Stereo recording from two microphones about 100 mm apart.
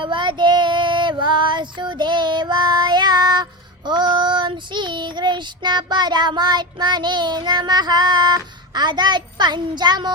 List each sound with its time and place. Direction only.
0.0 s child singing: 55° right (ahead or behind)